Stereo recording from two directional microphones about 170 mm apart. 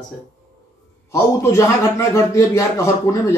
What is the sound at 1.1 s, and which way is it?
A man's voice, 20° left (ahead or behind).